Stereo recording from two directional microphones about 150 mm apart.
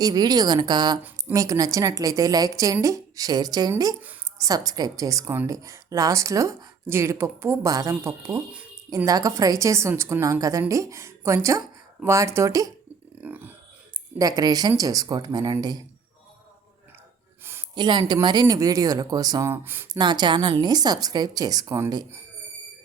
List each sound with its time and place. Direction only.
0.0 s a woman's voice: 25° right (ahead or behind)
13.2 s burping: 10° right (ahead or behind)
14.2 s a woman's voice: 25° right (ahead or behind)
17.7 s a woman's voice: 30° right (ahead or behind); by 19.9 s 15° right (ahead or behind)
19.9 s a woman's voice: 30° right (ahead or behind)